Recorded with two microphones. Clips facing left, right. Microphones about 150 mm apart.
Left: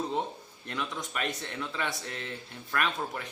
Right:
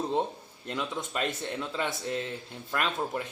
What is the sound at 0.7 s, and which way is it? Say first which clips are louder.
Speech: right 2 dB; 20° right (ahead or behind).